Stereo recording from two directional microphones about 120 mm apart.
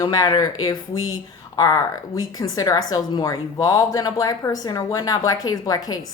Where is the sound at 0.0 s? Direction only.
30° left (ahead or behind).